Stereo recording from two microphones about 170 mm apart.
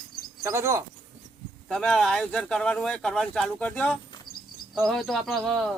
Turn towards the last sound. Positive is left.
turn(degrees=0)  # may be behind; listen again after turning